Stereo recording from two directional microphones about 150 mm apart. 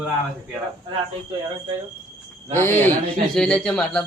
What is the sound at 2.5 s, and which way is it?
A man's voice, 15° left (ahead or behind).